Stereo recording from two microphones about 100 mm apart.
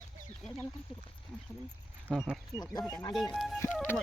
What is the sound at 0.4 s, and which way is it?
Speech, 10° left (ahead or behind).